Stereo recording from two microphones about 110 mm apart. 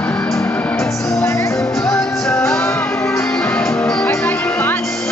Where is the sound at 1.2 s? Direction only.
25° left (ahead or behind).